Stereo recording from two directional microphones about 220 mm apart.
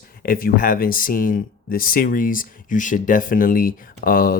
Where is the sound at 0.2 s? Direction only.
40° left (ahead or behind).